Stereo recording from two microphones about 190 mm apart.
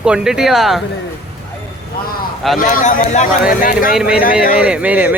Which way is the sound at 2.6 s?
45° left (ahead or behind).